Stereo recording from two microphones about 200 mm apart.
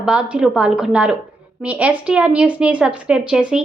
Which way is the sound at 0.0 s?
5° right (ahead or behind).